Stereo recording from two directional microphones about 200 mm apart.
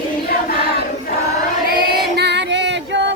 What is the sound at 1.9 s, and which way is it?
Female singing, 55° right (ahead or behind).